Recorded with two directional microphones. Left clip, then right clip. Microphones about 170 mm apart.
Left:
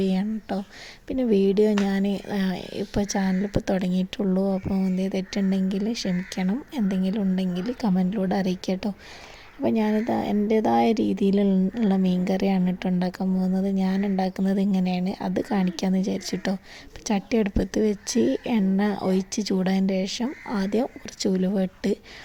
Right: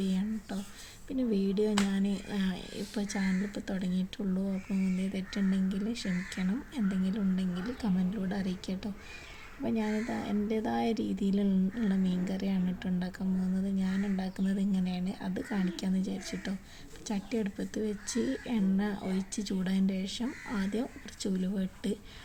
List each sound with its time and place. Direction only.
0.0 s speech: 45° left (ahead or behind)